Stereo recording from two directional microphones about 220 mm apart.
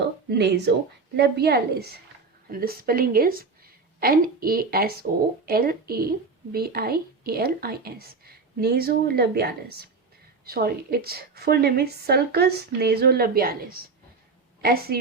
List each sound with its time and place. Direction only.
0.3 s a woman's voice: 50° right (ahead or behind)